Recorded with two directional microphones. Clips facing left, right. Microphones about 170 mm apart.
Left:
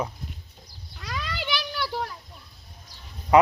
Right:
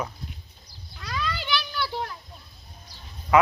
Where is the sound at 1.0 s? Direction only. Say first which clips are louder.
Right 2 dB; 10° left (ahead or behind).